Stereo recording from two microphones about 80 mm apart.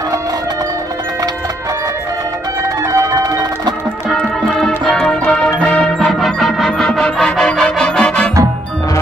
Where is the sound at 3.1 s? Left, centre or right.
Right.